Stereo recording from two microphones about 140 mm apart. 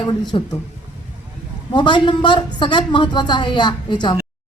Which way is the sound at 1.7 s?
35° left (ahead or behind).